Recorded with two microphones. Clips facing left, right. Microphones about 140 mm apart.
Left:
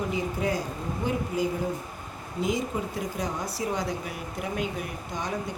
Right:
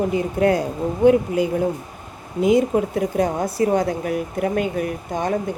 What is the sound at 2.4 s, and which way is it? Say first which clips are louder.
Speech: right 11 dB; 65° right (ahead or behind).